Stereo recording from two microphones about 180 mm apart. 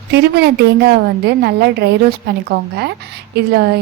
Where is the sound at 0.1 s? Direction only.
65° right (ahead or behind).